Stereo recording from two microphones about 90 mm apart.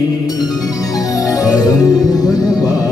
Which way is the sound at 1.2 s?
40° left (ahead or behind).